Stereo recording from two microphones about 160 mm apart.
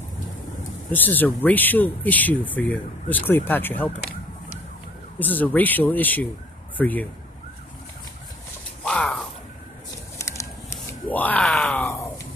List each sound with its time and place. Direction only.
0.9 s speech: 10° left (ahead or behind)
5.2 s speech: 10° left (ahead or behind)
8.8 s a sound: 5° left (ahead or behind)
10.1 s groan: 15° left (ahead or behind)